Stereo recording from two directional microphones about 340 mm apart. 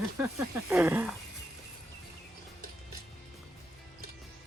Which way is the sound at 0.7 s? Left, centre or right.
Centre.